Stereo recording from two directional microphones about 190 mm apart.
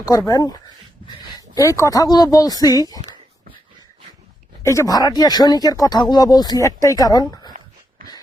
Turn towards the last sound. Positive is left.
turn(degrees=20)  # may be behind; listen again after turning